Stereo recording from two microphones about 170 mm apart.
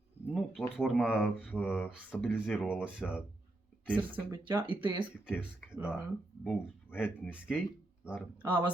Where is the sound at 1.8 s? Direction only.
10° left (ahead or behind).